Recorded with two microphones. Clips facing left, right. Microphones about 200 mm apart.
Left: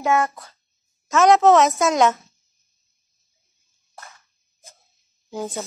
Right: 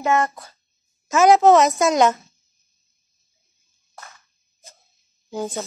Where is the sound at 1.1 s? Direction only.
Centre (ahead or behind).